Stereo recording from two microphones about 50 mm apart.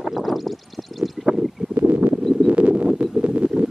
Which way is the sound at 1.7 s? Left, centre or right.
Right.